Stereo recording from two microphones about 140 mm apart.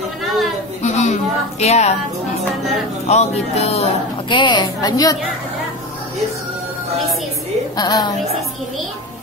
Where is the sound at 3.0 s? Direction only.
50° left (ahead or behind).